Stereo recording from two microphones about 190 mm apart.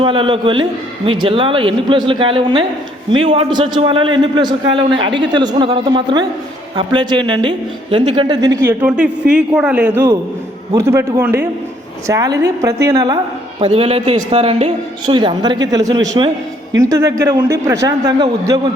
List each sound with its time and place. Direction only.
0.0 s a woman's voice: 25° right (ahead or behind)
8.6 s a man's voice: 5° right (ahead or behind)
13.6 s a woman's voice: 30° right (ahead or behind)